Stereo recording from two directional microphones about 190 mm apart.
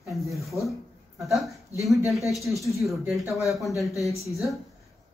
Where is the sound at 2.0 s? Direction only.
Centre (ahead or behind).